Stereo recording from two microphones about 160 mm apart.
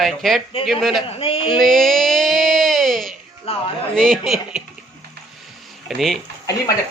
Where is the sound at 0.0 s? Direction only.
Centre (ahead or behind).